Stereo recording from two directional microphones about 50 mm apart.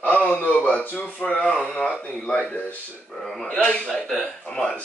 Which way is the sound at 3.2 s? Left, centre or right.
Centre.